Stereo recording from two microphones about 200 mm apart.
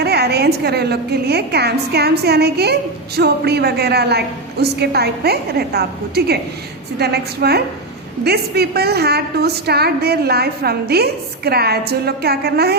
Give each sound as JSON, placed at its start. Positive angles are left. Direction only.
{"t": 0.0, "sound": "a woman's voice", "side_deg": -55}